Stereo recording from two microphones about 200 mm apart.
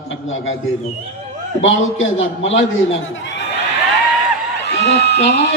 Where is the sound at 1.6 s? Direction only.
75° left (ahead or behind).